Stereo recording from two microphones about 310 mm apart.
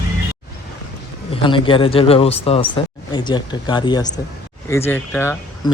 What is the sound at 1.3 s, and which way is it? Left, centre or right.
Speech, centre.